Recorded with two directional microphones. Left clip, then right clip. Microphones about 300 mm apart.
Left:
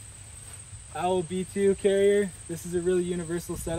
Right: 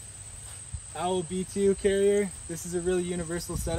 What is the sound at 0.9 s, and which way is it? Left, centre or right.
Speech, centre.